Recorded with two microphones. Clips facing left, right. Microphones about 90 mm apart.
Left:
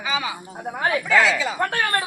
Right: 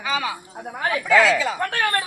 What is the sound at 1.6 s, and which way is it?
Speech, 30° left (ahead or behind).